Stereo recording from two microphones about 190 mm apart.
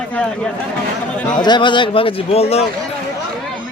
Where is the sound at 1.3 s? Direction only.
25° left (ahead or behind).